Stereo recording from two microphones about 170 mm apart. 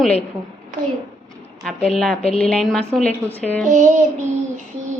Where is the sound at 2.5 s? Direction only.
Centre (ahead or behind).